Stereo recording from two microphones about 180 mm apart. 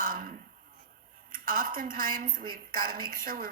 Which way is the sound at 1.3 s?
50° right (ahead or behind).